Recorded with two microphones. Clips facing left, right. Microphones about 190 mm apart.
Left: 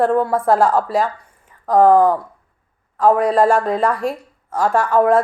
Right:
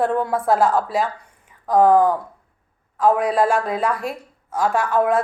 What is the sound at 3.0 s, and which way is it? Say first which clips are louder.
Speech: left 3 dB; 10° right (ahead or behind).